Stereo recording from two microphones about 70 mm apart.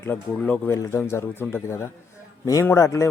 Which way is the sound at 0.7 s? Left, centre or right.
Left.